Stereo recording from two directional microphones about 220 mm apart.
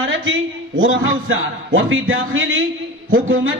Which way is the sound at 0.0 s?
60° right (ahead or behind).